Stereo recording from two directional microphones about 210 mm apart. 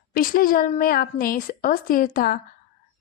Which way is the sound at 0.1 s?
40° left (ahead or behind).